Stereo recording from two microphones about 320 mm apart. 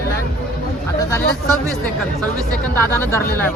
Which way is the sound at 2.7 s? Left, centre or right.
Centre.